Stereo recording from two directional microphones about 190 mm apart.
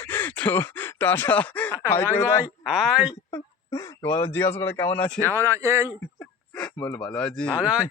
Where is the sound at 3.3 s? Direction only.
15° left (ahead or behind).